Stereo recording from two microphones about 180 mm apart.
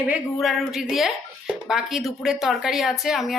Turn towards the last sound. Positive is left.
turn(degrees=0)  # may be behind; listen again after turning